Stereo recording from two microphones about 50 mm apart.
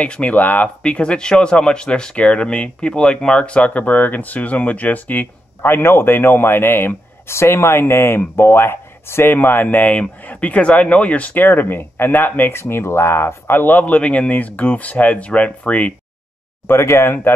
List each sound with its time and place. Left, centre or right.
0.0 s speech: left
0.8 s speech: centre; by 5.7 s left
5.7 s speech: left
9.8 s speech: left
11.3 s speech: left
16.6 s speech: left